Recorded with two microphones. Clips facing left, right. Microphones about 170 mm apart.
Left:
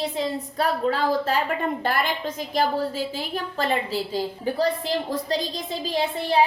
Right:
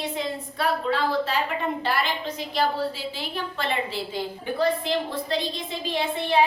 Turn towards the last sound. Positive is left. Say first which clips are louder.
# left 1 dB
turn(degrees=40)  # may be behind; listen again after turning